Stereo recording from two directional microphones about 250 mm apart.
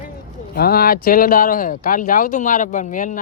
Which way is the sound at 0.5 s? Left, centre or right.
Left.